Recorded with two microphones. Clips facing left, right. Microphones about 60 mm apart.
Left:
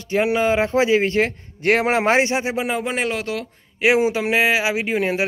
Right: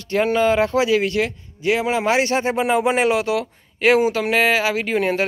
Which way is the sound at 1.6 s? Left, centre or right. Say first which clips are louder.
Left 2 dB; left.